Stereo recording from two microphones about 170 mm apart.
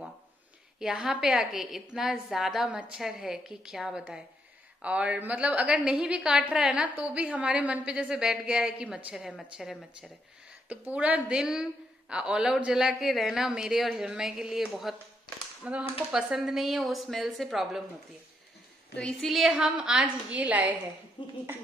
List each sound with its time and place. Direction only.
0.7 s a woman's voice: 5° right (ahead or behind)
18.9 s a woman's voice: 5° left (ahead or behind)
21.2 s speech: 30° left (ahead or behind)